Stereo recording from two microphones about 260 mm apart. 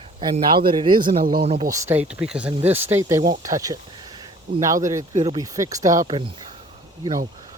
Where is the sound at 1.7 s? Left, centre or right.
Centre.